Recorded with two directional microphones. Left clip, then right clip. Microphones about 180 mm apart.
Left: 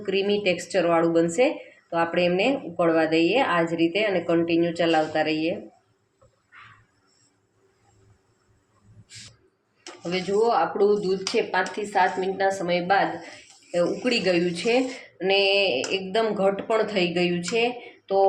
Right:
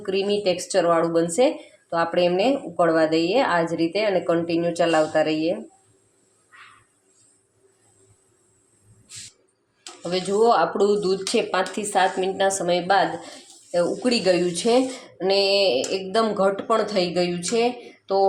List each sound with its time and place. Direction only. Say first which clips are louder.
0.0 s a woman's voice: right 1 dB; 5° right (ahead or behind)
10.0 s speech: right 3 dB; 20° right (ahead or behind)
11.1 s a woman's voice: right 2 dB; 40° right (ahead or behind)
13.7 s a woman's voice: right 2 dB; 10° right (ahead or behind)